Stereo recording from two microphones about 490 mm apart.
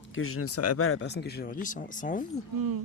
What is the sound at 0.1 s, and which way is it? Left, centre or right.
Speech, left.